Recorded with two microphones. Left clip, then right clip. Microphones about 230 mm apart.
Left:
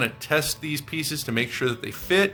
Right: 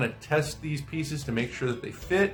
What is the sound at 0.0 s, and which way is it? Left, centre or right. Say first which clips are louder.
Speech: left 4 dB; left.